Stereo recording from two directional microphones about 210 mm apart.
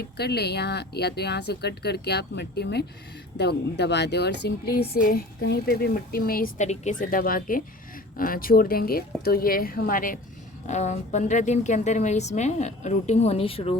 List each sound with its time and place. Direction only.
0.2 s a woman's voice: 50° left (ahead or behind); by 13.7 s 25° left (ahead or behind)